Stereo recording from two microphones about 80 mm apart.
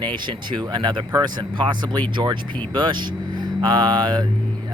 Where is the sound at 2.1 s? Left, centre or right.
Right.